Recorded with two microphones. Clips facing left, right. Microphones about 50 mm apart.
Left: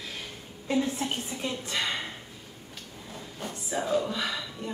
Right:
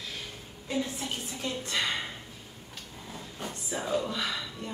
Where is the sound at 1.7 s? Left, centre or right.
Centre.